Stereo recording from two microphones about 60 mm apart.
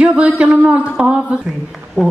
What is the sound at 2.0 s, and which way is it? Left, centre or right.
Speech, right.